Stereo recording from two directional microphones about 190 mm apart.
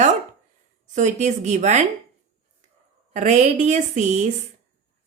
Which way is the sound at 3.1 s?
40° right (ahead or behind).